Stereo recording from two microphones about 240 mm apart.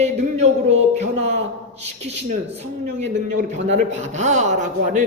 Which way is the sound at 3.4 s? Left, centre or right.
Right.